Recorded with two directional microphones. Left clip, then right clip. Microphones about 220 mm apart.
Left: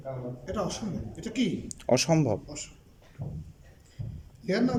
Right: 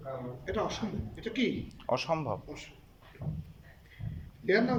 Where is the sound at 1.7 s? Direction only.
45° left (ahead or behind).